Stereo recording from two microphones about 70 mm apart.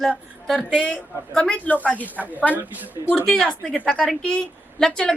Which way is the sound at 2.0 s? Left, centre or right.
Right.